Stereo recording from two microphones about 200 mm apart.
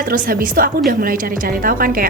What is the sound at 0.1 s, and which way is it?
Speech, 45° right (ahead or behind).